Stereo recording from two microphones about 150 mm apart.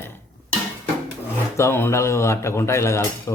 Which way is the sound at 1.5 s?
15° left (ahead or behind).